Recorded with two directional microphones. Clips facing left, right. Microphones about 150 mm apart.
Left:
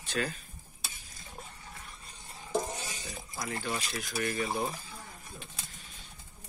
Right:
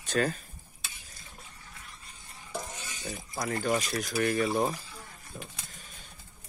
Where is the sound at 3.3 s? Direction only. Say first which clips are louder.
Right 7 dB; 45° right (ahead or behind).